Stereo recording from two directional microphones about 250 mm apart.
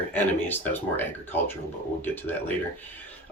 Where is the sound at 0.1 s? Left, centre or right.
Centre.